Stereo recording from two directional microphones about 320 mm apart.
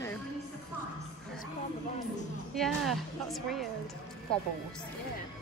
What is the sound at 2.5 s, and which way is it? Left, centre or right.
A woman's voice, centre.